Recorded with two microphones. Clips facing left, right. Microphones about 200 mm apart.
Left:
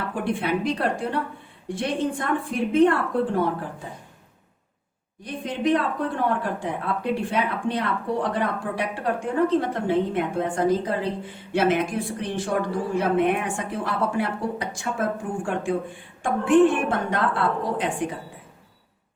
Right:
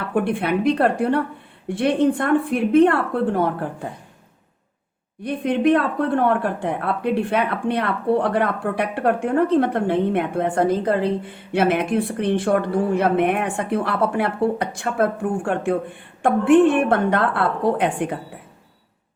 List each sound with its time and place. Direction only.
0.1 s speech: 60° right (ahead or behind)
5.2 s speech: 60° right (ahead or behind)